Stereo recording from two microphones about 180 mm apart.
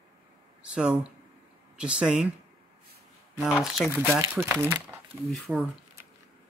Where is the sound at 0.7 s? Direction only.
5° right (ahead or behind).